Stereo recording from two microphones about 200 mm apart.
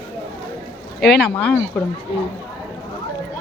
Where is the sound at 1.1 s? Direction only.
5° left (ahead or behind).